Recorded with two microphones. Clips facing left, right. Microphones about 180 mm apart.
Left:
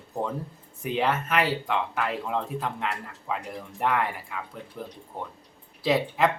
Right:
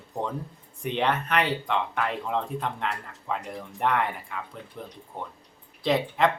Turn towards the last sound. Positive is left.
turn(degrees=5)  # may be behind; listen again after turning